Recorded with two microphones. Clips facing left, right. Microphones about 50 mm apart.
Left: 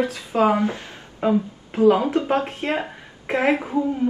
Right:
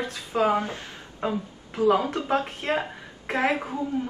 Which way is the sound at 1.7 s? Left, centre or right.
Left.